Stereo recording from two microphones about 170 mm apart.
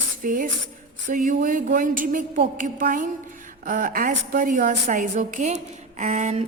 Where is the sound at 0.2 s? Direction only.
50° right (ahead or behind).